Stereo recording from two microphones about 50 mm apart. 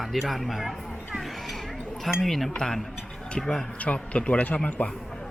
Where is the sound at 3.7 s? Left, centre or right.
Left.